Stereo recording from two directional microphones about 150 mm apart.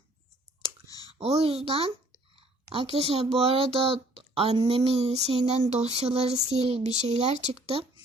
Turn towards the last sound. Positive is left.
turn(degrees=-40)  # may be behind; listen again after turning